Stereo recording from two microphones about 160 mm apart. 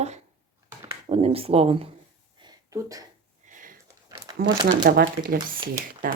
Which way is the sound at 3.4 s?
55° right (ahead or behind).